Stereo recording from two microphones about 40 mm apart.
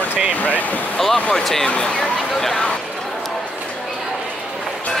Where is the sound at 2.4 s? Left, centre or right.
Centre.